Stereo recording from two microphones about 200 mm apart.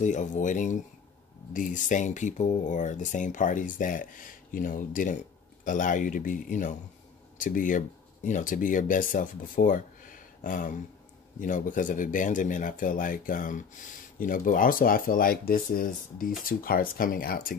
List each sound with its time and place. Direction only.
0.0 s speech: 40° left (ahead or behind)